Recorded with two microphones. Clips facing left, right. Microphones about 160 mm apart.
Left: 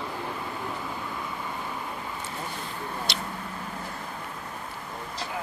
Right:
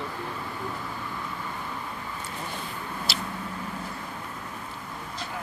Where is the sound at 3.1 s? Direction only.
5° right (ahead or behind).